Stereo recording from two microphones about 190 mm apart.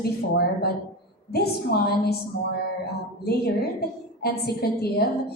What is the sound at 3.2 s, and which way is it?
A woman's voice, 55° left (ahead or behind).